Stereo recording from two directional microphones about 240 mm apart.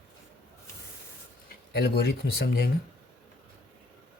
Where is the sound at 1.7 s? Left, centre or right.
Left.